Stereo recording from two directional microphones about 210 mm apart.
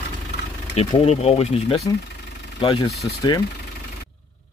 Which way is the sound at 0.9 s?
30° left (ahead or behind).